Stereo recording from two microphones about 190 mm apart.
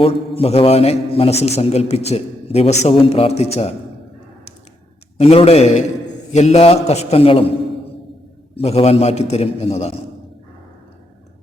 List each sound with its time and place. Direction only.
0.0 s a man's voice: 30° left (ahead or behind)
5.2 s a man's voice: 30° left (ahead or behind)
8.5 s a man's voice: 30° left (ahead or behind)